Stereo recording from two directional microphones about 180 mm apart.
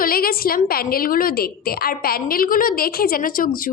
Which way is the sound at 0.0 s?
55° left (ahead or behind).